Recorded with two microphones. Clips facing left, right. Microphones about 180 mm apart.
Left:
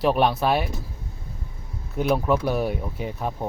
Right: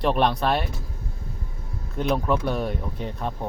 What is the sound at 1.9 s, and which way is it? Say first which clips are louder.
Speech: left 2 dB; 5° left (ahead or behind).